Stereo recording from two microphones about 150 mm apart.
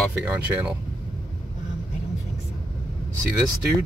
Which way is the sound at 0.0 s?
5° right (ahead or behind).